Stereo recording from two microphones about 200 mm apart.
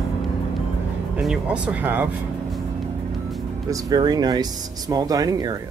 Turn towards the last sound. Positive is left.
turn(degrees=-20)  # may be behind; listen again after turning